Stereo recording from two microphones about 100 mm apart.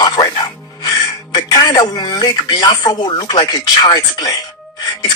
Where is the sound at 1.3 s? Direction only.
45° left (ahead or behind).